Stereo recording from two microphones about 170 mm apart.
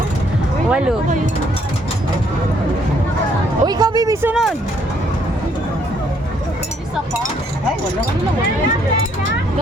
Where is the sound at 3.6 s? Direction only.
25° right (ahead or behind).